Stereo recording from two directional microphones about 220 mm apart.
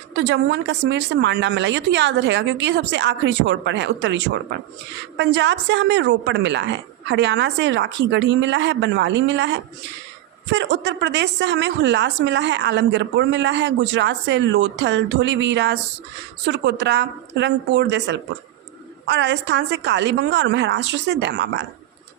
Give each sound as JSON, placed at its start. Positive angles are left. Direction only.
{"t": 0.2, "sound": "a woman's voice", "side_deg": -55}